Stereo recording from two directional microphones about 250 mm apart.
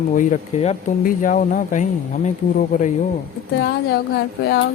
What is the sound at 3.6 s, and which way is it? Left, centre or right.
Speech, left.